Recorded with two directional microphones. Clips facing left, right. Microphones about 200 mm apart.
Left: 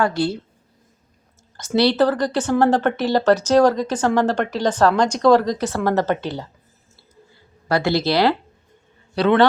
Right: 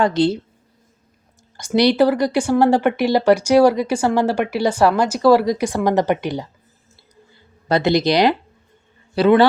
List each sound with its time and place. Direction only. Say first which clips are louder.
0.0 s a woman's voice: right 4 dB; 20° right (ahead or behind)
1.5 s speech: right 2 dB; 15° right (ahead or behind)
7.7 s speech: right 3 dB; 20° right (ahead or behind)
9.1 s a man's voice: right 2 dB; 5° right (ahead or behind)